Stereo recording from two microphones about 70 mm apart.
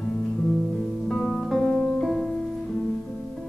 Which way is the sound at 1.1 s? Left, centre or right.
Centre.